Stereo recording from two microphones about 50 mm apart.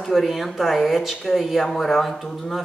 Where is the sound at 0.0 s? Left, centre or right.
Centre.